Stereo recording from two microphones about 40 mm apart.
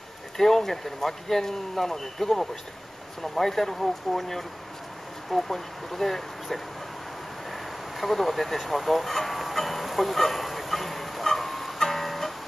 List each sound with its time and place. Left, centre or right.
0.4 s speech: centre
7.5 s vehicle: centre